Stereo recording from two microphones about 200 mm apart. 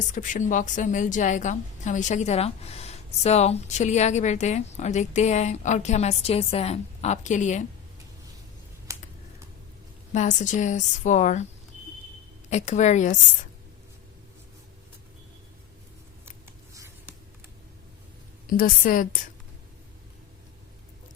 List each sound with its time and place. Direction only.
0.1 s a woman's voice: 40° left (ahead or behind)
8.9 s computer keyboard: 15° right (ahead or behind)
10.1 s a woman's voice: 35° left (ahead or behind)
12.5 s a woman's voice: 35° left (ahead or behind)
16.7 s a sound: 15° right (ahead or behind)
18.4 s a woman's voice: 45° left (ahead or behind)